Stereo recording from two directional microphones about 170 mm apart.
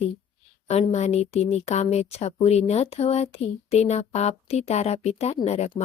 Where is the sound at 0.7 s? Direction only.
40° left (ahead or behind).